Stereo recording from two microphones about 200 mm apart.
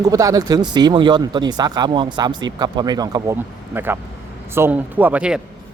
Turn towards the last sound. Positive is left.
turn(degrees=-5)  # may be behind; listen again after turning